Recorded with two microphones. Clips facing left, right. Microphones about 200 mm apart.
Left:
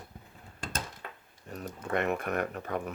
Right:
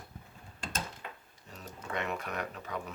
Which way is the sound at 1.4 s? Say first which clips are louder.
Left 7 dB; 55° left (ahead or behind).